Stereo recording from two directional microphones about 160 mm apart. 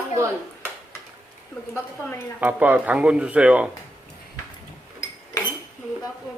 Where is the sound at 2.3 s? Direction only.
10° right (ahead or behind).